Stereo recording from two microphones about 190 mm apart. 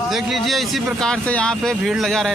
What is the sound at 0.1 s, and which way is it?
A man's voice, centre (ahead or behind).